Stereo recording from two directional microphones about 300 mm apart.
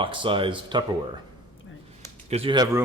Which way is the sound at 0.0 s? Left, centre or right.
Centre.